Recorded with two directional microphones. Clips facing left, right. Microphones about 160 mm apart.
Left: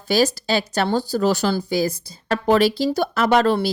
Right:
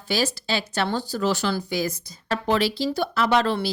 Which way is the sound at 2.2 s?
45° left (ahead or behind).